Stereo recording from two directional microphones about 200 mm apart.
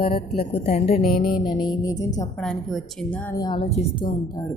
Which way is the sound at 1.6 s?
20° left (ahead or behind).